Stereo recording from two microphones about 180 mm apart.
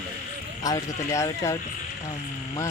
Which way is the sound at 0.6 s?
20° left (ahead or behind).